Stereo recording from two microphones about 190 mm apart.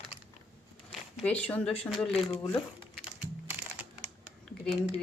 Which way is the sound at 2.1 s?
30° left (ahead or behind).